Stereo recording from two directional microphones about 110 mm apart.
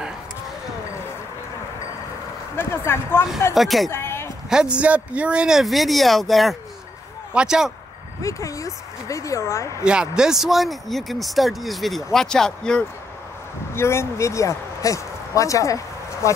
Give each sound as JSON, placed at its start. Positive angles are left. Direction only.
{"t": 2.5, "sound": "speech", "side_deg": 20}
{"t": 3.5, "sound": "speech", "side_deg": 0}
{"t": 3.9, "sound": "a sound", "side_deg": 25}
{"t": 4.5, "sound": "speech", "side_deg": -10}
{"t": 8.2, "sound": "speech", "side_deg": 30}
{"t": 9.8, "sound": "speech", "side_deg": -5}
{"t": 13.7, "sound": "speech", "side_deg": 25}